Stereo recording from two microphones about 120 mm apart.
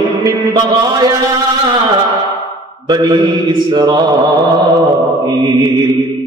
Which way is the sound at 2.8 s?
35° right (ahead or behind).